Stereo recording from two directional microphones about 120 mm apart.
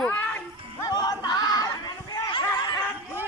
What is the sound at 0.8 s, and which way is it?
Chatter, 35° left (ahead or behind).